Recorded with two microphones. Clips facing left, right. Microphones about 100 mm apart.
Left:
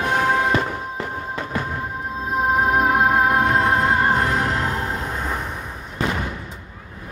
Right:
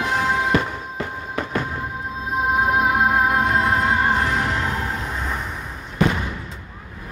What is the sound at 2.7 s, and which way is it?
Music, 45° left (ahead or behind).